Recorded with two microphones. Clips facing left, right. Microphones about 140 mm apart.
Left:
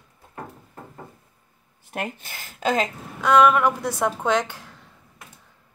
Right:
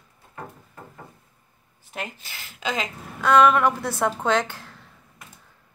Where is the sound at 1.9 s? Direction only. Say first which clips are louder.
Left 4 dB; 55° left (ahead or behind).